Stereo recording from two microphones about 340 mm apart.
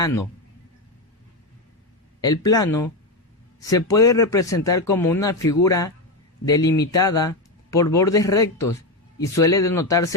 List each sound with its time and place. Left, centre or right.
0.0 s speech: centre
2.2 s speech: centre